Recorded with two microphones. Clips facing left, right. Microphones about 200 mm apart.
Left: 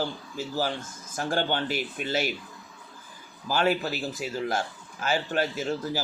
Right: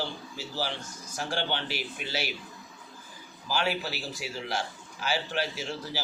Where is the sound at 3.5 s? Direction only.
50° left (ahead or behind).